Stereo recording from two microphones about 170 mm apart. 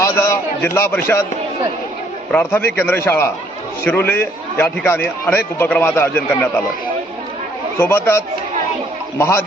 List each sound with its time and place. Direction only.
0.0 s a man's voice: 15° left (ahead or behind)
2.3 s a man's voice: 10° left (ahead or behind)
7.8 s a man's voice: 15° left (ahead or behind)